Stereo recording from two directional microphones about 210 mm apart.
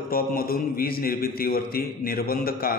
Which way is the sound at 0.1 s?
45° left (ahead or behind).